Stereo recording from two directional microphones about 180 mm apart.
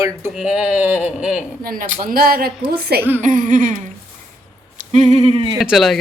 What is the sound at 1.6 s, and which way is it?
Speech, 50° right (ahead or behind).